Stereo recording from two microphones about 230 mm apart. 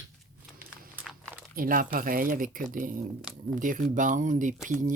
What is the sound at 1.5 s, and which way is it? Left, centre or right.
Speech, right.